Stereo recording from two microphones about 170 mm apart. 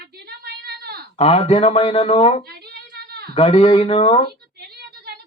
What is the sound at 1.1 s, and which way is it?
Speech, 35° left (ahead or behind).